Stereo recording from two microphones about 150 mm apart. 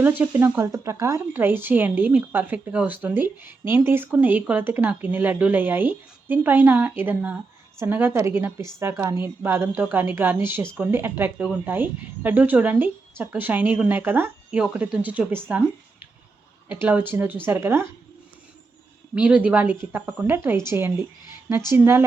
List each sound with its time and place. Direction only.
0.0 s speech: 15° right (ahead or behind)
19.1 s speech: 10° right (ahead or behind)